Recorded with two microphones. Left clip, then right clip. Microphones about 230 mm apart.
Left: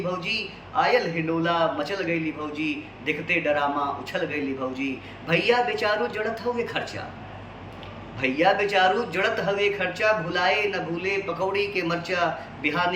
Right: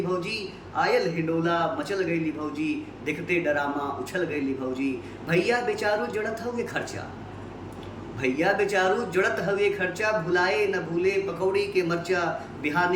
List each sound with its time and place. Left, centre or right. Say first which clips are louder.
0.1 s a man's voice: left 1 dB; centre
8.2 s a man's voice: left 3 dB; centre